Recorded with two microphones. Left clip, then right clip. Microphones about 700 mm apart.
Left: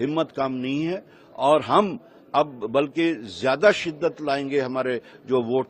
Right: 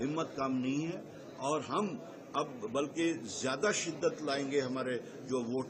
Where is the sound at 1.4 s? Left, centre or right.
Left.